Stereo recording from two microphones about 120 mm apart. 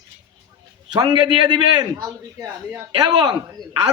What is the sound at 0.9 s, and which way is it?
A man's voice, 35° right (ahead or behind).